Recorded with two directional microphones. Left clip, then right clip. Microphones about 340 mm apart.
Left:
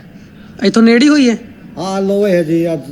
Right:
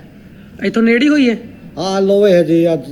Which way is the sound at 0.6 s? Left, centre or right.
Centre.